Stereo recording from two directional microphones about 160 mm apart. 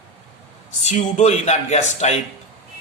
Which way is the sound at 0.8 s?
45° left (ahead or behind).